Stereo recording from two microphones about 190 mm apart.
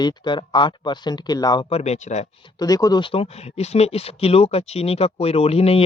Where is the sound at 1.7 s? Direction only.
35° left (ahead or behind).